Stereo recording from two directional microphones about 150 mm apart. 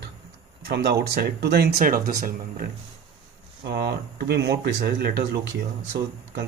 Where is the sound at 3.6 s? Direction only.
90° right.